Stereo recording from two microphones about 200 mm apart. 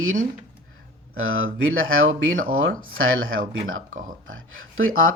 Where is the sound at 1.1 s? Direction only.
85° right.